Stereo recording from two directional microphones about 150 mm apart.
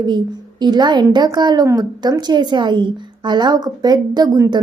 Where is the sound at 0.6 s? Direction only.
30° right (ahead or behind).